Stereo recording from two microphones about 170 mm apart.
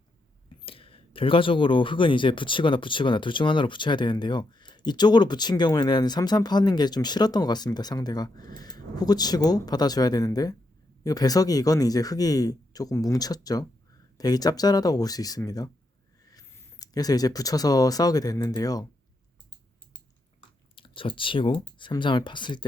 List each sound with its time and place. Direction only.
0.6 s speech: 35° left (ahead or behind)
20.7 s speech: 30° left (ahead or behind)